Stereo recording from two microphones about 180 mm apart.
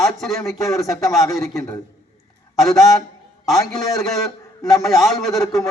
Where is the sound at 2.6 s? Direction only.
Centre (ahead or behind).